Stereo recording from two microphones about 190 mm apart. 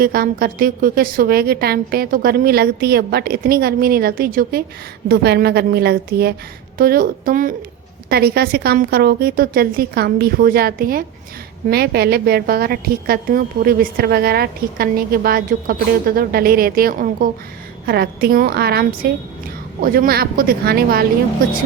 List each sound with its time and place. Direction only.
0.0 s a woman's voice: 50° right (ahead or behind)